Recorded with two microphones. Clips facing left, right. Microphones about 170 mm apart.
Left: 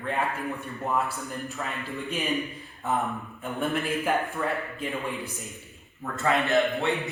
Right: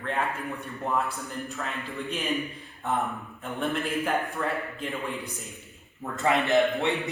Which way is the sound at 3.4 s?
Centre (ahead or behind).